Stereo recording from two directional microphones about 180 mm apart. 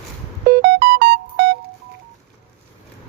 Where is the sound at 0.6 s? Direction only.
65° right (ahead or behind).